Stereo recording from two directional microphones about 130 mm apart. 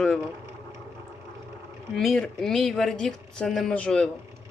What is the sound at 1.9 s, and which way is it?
A man's voice, 5° left (ahead or behind).